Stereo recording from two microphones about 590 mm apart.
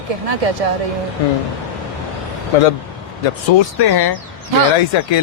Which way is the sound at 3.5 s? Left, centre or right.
Left.